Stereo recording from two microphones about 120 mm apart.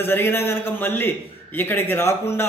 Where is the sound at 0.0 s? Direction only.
20° left (ahead or behind).